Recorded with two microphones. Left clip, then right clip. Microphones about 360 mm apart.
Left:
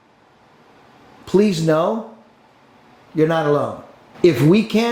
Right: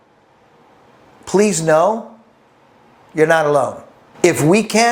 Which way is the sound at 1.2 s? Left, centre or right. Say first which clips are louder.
Right 2 dB; right.